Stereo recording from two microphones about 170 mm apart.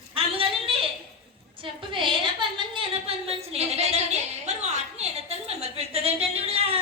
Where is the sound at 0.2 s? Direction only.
30° right (ahead or behind).